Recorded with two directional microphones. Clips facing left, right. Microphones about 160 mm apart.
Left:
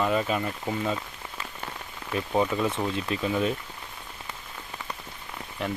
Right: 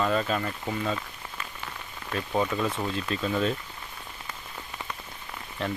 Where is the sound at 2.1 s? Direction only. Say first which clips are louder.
Left 2 dB; 15° left (ahead or behind).